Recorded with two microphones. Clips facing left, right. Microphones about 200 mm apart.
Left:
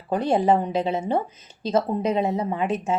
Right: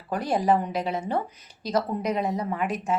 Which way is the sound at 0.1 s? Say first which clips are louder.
Left 3 dB; 25° left (ahead or behind).